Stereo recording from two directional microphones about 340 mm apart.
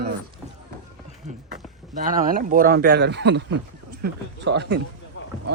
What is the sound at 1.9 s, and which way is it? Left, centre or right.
Speech, right.